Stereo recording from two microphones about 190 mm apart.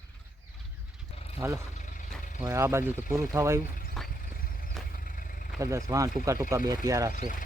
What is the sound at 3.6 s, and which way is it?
Speech, 45° left (ahead or behind).